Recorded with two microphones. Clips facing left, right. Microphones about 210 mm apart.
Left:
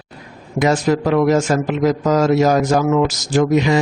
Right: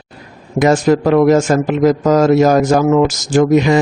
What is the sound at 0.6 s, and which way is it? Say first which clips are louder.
A man's voice: right 4 dB; 50° right (ahead or behind).